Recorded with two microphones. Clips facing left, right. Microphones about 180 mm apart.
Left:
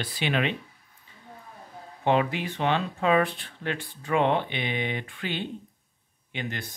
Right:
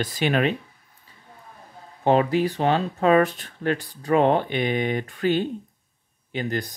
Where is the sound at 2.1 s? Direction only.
40° right (ahead or behind).